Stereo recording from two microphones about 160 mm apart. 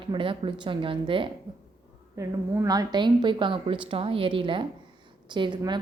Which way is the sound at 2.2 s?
20° right (ahead or behind).